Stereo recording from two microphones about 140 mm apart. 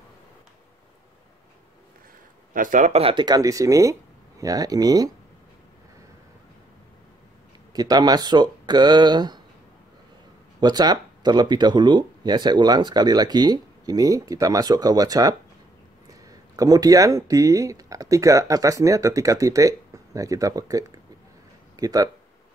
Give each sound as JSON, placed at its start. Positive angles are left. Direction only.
{"t": 2.5, "sound": "speech", "side_deg": -70}
{"t": 2.9, "sound": "speech", "side_deg": -40}
{"t": 7.7, "sound": "speech", "side_deg": -30}
{"t": 10.6, "sound": "speech", "side_deg": -30}